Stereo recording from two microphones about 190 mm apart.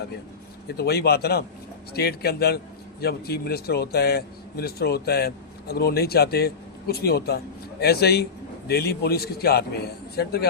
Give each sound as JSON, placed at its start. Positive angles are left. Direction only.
{"t": 0.8, "sound": "speech", "side_deg": 55}